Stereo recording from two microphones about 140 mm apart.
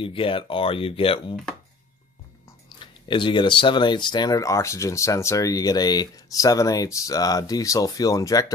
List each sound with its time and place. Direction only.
0.0 s speech: 40° left (ahead or behind)
2.8 s speech: 35° left (ahead or behind)